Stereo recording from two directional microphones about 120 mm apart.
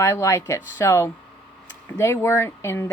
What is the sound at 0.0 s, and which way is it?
Speech, 25° left (ahead or behind).